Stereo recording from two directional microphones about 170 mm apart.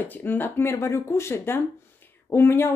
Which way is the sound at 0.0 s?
10° left (ahead or behind).